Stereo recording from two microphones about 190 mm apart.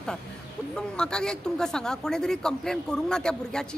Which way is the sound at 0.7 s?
5° left (ahead or behind).